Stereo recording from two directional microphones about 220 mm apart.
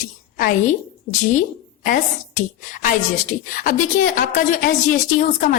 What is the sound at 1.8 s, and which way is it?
Speech, 40° left (ahead or behind).